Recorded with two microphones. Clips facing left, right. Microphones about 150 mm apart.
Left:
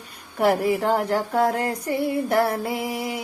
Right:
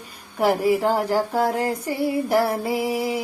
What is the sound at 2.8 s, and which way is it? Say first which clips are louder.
Music: right 4 dB; 30° right (ahead or behind).